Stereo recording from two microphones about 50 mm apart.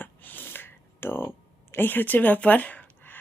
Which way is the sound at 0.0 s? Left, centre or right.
Left.